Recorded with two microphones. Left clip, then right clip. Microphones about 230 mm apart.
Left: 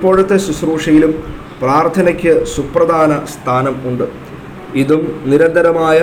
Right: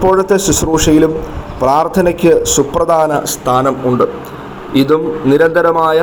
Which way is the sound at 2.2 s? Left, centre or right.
Right.